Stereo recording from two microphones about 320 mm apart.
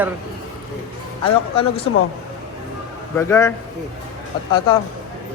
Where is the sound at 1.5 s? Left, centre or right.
Centre.